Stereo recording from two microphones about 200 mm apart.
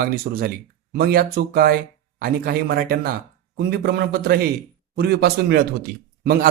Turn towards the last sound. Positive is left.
turn(degrees=-50)  # may be behind; listen again after turning